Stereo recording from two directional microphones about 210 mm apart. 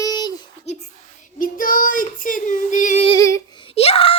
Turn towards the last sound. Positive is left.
turn(degrees=30)  # may be behind; listen again after turning